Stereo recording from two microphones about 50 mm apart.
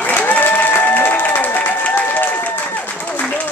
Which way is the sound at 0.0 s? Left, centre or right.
Left.